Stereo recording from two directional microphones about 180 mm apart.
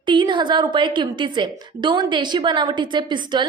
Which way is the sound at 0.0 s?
25° right (ahead or behind).